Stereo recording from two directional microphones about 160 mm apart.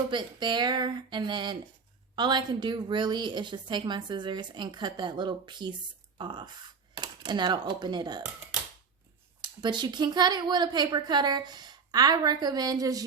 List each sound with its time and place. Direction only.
0.1 s a woman's voice: 30° right (ahead or behind)
9.4 s a woman's voice: 30° right (ahead or behind)